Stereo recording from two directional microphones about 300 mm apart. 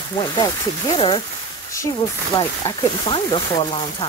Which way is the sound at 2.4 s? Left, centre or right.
Centre.